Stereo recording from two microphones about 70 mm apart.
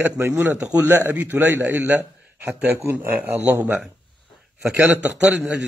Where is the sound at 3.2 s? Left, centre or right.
Right.